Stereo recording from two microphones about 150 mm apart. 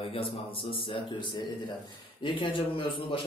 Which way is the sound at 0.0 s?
40° left (ahead or behind).